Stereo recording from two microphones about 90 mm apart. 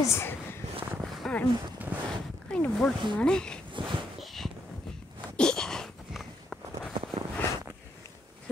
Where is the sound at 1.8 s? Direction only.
20° right (ahead or behind).